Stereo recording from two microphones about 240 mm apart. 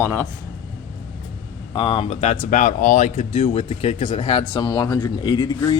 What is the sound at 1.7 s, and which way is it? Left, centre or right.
Speech, left.